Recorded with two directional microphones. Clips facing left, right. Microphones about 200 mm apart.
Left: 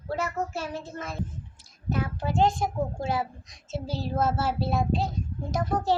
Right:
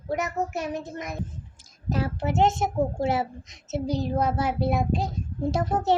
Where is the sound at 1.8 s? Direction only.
35° right (ahead or behind); by 5.1 s 15° right (ahead or behind).